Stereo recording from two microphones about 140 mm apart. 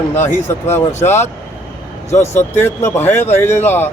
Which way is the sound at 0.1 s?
20° left (ahead or behind).